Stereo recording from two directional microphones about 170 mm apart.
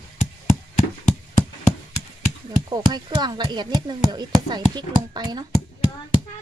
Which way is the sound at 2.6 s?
25° right (ahead or behind).